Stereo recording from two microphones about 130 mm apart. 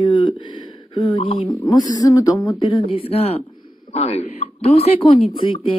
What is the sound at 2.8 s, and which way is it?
Speech, 50° left (ahead or behind).